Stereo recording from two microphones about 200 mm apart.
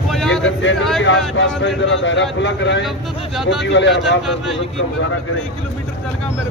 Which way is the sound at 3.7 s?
60° left (ahead or behind).